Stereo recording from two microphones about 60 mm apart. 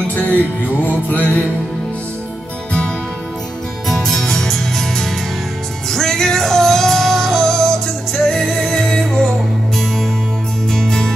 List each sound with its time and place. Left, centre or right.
0.1 s music: left
3.8 s music: centre
10.7 s music: centre